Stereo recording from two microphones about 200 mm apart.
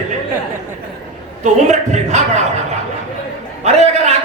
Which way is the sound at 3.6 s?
35° right (ahead or behind).